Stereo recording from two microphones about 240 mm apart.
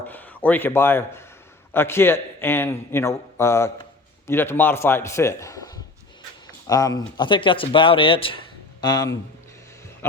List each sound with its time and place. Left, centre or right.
0.1 s a man's voice: centre
10.0 s music: centre